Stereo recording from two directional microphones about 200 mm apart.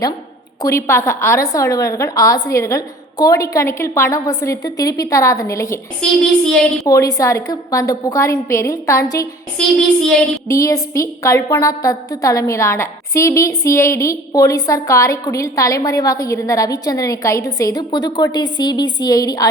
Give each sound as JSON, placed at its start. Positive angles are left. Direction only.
{"t": 0.6, "sound": "a woman's voice", "side_deg": 15}
{"t": 6.0, "sound": "speech", "side_deg": 5}
{"t": 6.8, "sound": "a woman's voice", "side_deg": 15}
{"t": 9.6, "sound": "speech", "side_deg": 5}
{"t": 10.5, "sound": "a woman's voice", "side_deg": 15}